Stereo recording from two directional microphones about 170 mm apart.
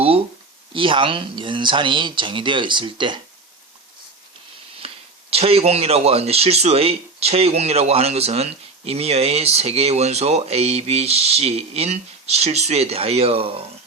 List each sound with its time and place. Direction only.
0.7 s speech: 30° right (ahead or behind)
4.8 s a sound: 35° right (ahead or behind)
5.3 s speech: 35° right (ahead or behind)